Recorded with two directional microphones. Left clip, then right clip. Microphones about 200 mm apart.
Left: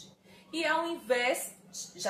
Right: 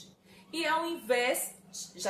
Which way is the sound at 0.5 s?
15° right (ahead or behind).